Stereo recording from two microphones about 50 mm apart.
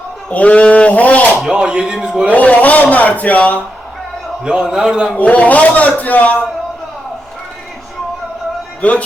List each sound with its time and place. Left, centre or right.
0.3 s a sound: left
1.5 s speech: centre
2.3 s a man's voice: left
4.4 s speech: centre
5.1 s a man's voice: left
8.8 s a man's voice: left